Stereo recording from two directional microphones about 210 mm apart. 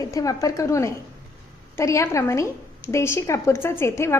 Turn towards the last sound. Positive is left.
turn(degrees=10)  # may be behind; listen again after turning